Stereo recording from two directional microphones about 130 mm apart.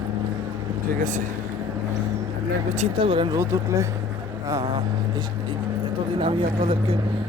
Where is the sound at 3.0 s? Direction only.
40° right (ahead or behind).